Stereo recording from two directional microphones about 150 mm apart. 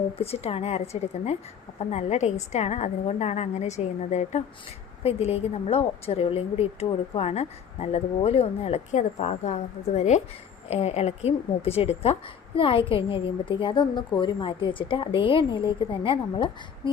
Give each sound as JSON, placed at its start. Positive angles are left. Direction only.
{"t": 0.2, "sound": "a woman's voice", "side_deg": 40}
{"t": 1.9, "sound": "a woman's voice", "side_deg": 50}